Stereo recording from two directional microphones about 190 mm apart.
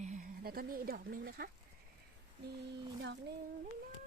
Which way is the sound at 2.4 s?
65° right (ahead or behind).